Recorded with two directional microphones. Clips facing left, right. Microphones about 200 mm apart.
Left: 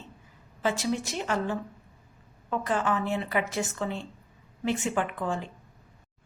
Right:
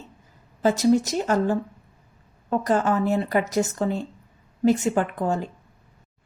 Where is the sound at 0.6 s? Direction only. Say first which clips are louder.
Right 9 dB; 40° right (ahead or behind).